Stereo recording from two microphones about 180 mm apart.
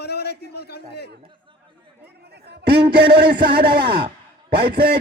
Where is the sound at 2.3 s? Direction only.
65° right (ahead or behind).